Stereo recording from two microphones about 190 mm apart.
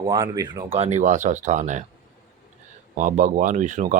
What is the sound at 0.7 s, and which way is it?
Speech, 35° right (ahead or behind).